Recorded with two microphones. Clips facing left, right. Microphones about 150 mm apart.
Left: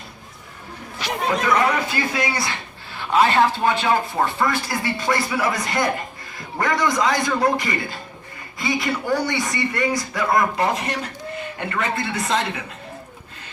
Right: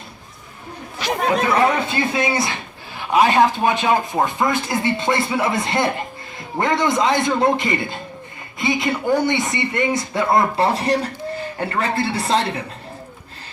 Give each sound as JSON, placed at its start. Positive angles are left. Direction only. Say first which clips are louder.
{"t": 1.4, "sound": "a man's voice", "louder": "right 1 dB", "side_deg": -30}